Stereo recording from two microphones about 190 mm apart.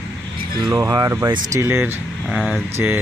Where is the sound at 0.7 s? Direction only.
15° right (ahead or behind).